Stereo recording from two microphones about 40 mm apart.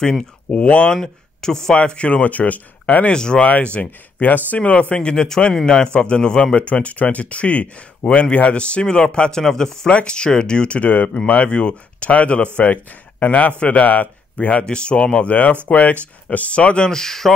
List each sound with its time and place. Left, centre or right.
0.5 s speech: left
1.0 s speech: centre
1.8 s speech: left
3.1 s speech: left
3.6 s speech: left
4.6 s speech: left
6.6 s speech: left; by 9.8 s centre
9.8 s speech: left
10.8 s speech: left
14.6 s speech: left
15.2 s speech: left
16.9 s speech: centre